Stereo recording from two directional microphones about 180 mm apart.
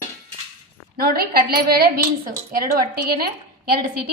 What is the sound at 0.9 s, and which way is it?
A woman's voice, 55° right (ahead or behind).